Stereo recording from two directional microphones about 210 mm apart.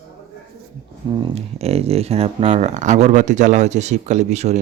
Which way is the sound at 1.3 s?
30° right (ahead or behind).